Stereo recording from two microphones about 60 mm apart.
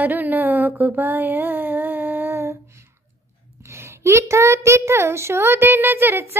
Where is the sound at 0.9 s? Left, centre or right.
Right.